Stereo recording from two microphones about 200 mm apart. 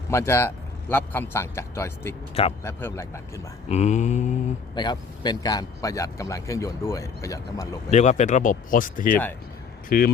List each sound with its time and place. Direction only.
0.1 s a man's voice: 15° left (ahead or behind)
3.7 s speech: 35° left (ahead or behind)
4.7 s a man's voice: 20° left (ahead or behind)
7.9 s speech: 35° left (ahead or behind)